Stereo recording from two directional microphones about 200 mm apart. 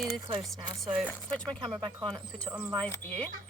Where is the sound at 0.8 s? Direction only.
5° right (ahead or behind).